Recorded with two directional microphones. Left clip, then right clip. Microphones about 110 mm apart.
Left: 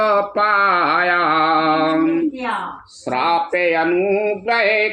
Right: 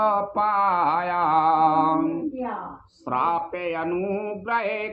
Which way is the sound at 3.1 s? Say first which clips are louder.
Left 6 dB; 25° right (ahead or behind).